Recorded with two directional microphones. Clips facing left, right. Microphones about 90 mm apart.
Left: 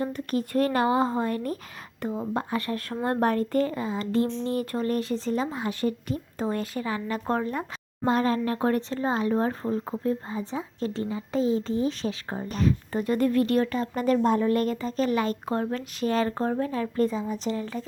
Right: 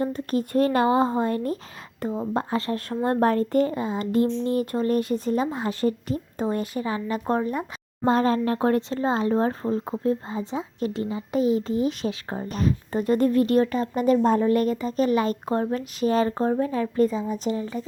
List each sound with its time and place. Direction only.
0.0 s speech: 30° right (ahead or behind)
2.0 s a woman's voice: 20° right (ahead or behind)
2.3 s speech: 30° right (ahead or behind)
4.1 s speech: 30° left (ahead or behind)
4.5 s speech: 25° right (ahead or behind)
8.0 s a woman's voice: 35° right (ahead or behind)
14.3 s speech: 35° right (ahead or behind)
14.5 s a woman's voice: 15° right (ahead or behind)